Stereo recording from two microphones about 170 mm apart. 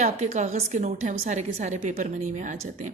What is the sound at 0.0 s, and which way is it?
Speech, 45° right (ahead or behind).